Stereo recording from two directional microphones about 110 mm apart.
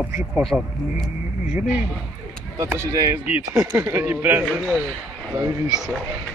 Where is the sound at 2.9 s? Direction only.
30° right (ahead or behind).